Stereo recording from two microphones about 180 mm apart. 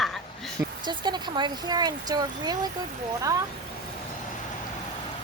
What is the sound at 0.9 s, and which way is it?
Speech, 25° right (ahead or behind).